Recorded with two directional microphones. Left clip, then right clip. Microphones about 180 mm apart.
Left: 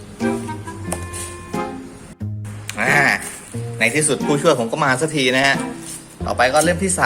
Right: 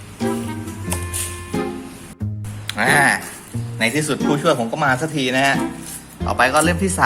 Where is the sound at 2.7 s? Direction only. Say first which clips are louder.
Even; 10° right (ahead or behind).